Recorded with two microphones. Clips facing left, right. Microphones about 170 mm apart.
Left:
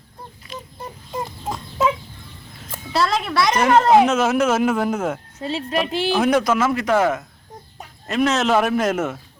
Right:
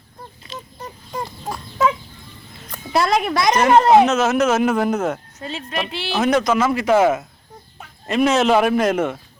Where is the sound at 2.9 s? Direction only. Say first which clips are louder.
Right 3 dB; 15° right (ahead or behind).